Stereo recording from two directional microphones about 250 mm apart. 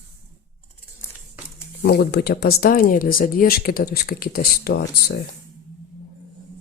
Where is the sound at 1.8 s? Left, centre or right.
Left.